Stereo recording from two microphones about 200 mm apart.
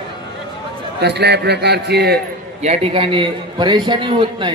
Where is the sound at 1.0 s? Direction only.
55° right (ahead or behind).